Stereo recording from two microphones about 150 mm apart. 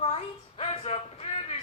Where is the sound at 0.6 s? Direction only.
40° left (ahead or behind).